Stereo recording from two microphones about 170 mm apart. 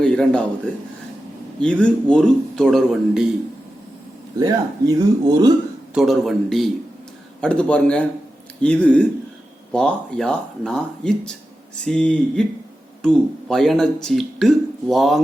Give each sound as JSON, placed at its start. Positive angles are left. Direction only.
{"t": 0.0, "sound": "a man's voice", "side_deg": 5}
{"t": 1.6, "sound": "speech", "side_deg": 5}
{"t": 4.4, "sound": "speech", "side_deg": -20}
{"t": 5.9, "sound": "a man's voice", "side_deg": 0}